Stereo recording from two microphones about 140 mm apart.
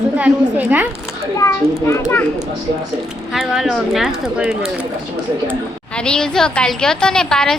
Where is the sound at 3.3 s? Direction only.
Centre (ahead or behind).